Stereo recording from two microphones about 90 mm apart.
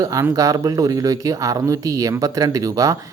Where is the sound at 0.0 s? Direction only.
40° right (ahead or behind).